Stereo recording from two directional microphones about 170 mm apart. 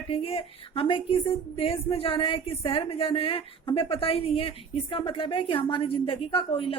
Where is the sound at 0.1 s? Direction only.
35° left (ahead or behind).